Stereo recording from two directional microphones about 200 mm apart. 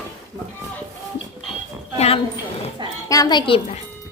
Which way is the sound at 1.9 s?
30° left (ahead or behind).